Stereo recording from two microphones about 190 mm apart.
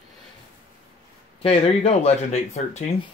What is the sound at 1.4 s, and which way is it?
Speech, 30° left (ahead or behind).